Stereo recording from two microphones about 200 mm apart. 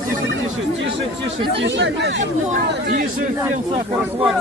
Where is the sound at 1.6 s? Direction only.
65° right (ahead or behind).